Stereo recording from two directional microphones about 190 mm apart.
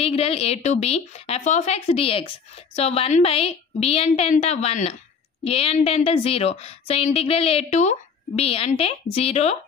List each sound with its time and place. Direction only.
0.0 s speech: 30° left (ahead or behind)